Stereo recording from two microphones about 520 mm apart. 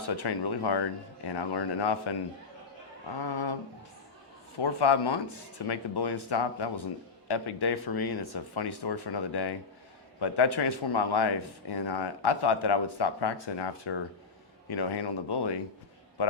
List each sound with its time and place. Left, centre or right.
0.2 s speech: left
3.2 s speech: left
4.5 s speech: left